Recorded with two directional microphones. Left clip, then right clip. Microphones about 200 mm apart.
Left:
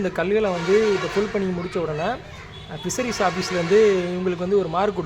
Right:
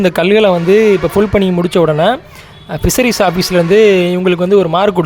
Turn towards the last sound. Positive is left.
turn(degrees=-45)  # may be behind; listen again after turning